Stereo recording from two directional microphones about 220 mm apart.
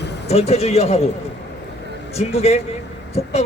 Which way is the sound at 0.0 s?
50° left (ahead or behind).